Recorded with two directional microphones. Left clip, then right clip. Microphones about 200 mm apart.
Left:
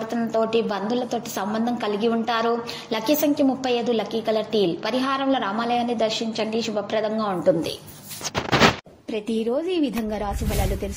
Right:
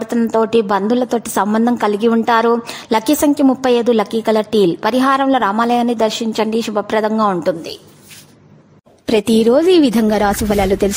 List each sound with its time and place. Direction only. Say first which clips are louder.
0.1 s a woman's voice: right 8 dB; 45° right (ahead or behind)
9.0 s a woman's voice: right 13 dB; 65° right (ahead or behind)